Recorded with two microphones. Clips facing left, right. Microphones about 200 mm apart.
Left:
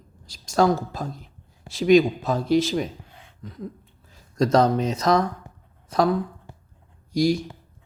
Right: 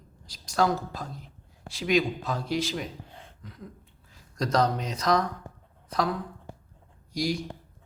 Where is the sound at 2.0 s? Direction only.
25° left (ahead or behind).